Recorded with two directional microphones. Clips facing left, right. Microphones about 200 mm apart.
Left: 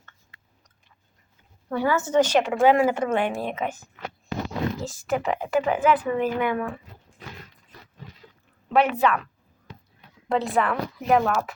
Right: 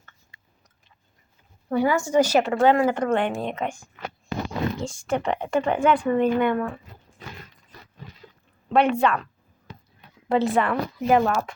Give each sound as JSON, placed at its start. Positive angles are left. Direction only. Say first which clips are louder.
{"t": 1.7, "sound": "a woman's voice", "louder": "right 1 dB", "side_deg": -15}
{"t": 2.5, "sound": "a woman's voice", "louder": "even", "side_deg": 10}
{"t": 8.7, "sound": "a woman's voice", "louder": "right 1 dB", "side_deg": 5}
{"t": 10.2, "sound": "a woman's voice", "louder": "right 2 dB", "side_deg": 0}